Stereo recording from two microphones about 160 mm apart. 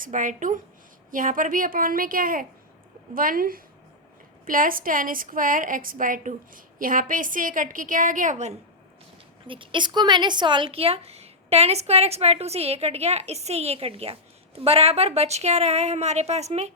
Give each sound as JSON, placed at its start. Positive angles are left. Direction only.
{"t": 0.0, "sound": "a woman's voice", "side_deg": -55}
{"t": 9.5, "sound": "a woman's voice", "side_deg": -30}